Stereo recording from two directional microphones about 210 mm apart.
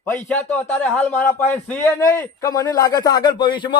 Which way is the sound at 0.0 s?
10° left (ahead or behind).